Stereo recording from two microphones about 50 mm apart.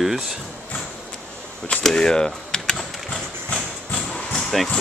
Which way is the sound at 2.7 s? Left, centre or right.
Centre.